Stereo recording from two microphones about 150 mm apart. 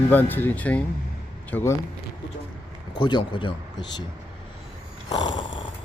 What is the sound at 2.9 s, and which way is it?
Speech, 30° left (ahead or behind).